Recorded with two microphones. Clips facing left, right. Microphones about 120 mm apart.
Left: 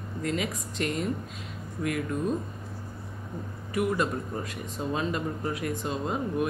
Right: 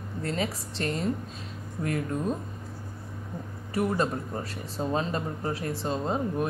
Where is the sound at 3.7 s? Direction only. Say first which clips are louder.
Even; 35° right (ahead or behind).